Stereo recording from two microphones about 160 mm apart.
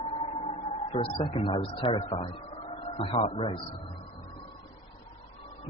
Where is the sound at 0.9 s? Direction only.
35° left (ahead or behind).